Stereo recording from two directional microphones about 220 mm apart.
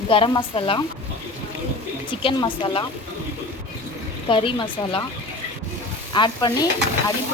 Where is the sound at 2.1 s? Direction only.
20° left (ahead or behind).